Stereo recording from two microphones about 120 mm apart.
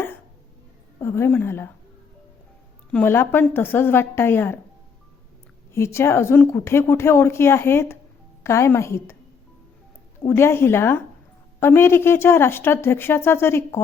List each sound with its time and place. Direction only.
0.9 s speech: 20° left (ahead or behind)
2.9 s a woman's voice: 15° left (ahead or behind)
5.7 s a woman's voice: 20° left (ahead or behind)
10.2 s a woman's voice: 20° left (ahead or behind)